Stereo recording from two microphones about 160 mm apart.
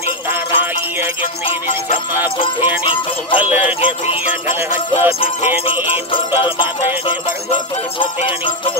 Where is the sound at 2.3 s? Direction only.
35° left (ahead or behind).